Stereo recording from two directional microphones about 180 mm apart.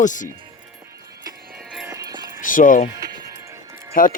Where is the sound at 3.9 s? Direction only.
50° left (ahead or behind).